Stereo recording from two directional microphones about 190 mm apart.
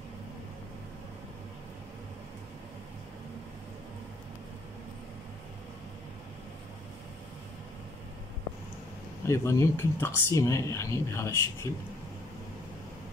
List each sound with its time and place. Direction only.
9.3 s speech: 15° left (ahead or behind)